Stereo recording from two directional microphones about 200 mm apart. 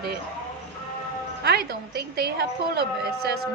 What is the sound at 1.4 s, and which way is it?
A woman's voice, 50° right (ahead or behind).